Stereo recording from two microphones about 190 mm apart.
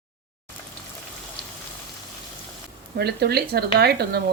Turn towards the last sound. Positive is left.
turn(degrees=-55)  # may be behind; listen again after turning